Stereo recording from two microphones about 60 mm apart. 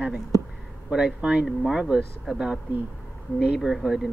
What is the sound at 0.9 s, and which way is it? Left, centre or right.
Speech, centre.